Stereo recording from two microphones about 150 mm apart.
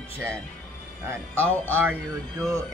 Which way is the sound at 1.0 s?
15° right (ahead or behind).